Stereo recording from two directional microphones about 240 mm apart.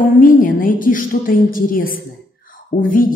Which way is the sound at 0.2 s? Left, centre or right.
Left.